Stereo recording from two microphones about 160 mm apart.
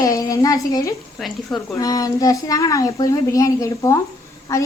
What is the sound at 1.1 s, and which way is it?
Speech, centre (ahead or behind).